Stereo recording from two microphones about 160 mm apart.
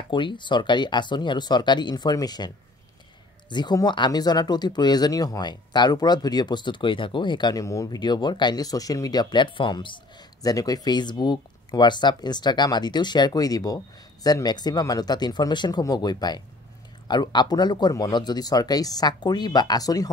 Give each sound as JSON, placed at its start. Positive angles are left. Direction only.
{"t": 0.1, "sound": "speech", "side_deg": 30}